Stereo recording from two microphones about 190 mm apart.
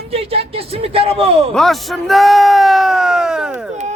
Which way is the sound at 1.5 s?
Centre (ahead or behind).